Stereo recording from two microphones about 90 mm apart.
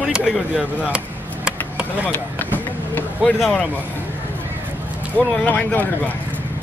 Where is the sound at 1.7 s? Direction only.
15° right (ahead or behind).